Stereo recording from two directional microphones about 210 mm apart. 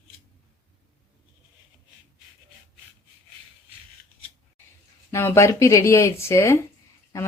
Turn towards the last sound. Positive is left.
turn(degrees=15)  # may be behind; listen again after turning